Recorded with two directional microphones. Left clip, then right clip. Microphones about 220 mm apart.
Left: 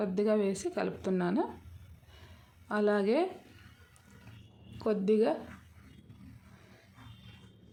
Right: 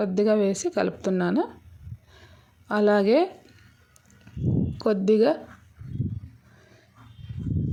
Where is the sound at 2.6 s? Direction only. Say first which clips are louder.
Right 8 dB; 30° right (ahead or behind).